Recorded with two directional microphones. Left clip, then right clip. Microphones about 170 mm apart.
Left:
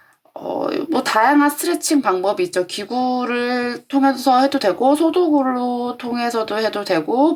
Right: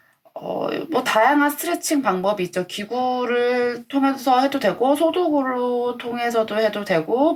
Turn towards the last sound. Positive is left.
turn(degrees=40)  # may be behind; listen again after turning